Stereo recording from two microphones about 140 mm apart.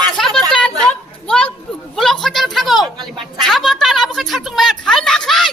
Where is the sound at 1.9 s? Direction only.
Centre (ahead or behind).